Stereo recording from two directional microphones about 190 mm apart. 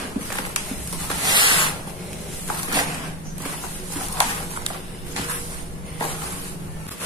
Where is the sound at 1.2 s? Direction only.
25° right (ahead or behind).